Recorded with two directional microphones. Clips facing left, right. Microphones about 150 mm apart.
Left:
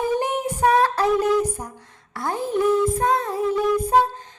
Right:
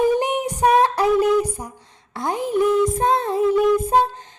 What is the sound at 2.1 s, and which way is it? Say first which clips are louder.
Speech: right 2 dB; 20° right (ahead or behind).